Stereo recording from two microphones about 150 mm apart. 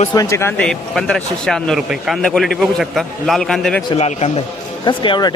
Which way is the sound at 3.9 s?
45° left (ahead or behind).